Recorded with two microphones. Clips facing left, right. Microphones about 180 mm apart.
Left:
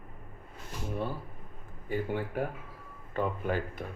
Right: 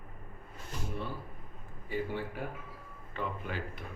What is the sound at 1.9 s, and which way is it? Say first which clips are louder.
Speech: left 3 dB; 50° left (ahead or behind).